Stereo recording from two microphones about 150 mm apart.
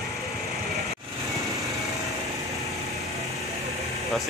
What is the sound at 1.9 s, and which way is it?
Light engine, 20° right (ahead or behind).